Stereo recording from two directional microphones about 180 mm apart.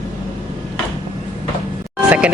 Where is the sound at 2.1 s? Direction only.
5° right (ahead or behind).